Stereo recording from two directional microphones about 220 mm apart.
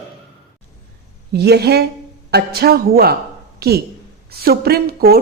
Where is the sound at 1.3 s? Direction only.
45° right (ahead or behind).